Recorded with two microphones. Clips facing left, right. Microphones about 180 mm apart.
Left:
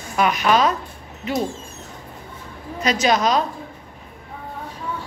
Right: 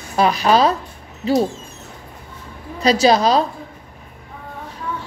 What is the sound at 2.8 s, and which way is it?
Speech, 35° right (ahead or behind).